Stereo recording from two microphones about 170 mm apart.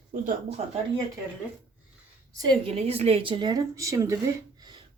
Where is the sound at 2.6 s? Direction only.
35° right (ahead or behind).